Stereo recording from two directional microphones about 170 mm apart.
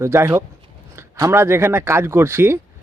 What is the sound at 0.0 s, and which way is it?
Speech, 15° right (ahead or behind).